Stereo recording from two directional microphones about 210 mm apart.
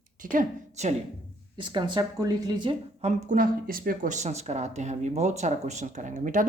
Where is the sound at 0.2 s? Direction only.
40° right (ahead or behind).